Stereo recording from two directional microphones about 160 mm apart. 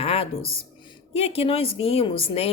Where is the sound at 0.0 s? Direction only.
40° left (ahead or behind).